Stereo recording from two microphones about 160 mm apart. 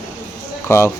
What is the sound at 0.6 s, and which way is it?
Speech, 20° left (ahead or behind).